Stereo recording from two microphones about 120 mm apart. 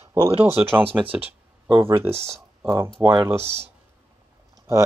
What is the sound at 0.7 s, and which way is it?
Speech, 45° right (ahead or behind).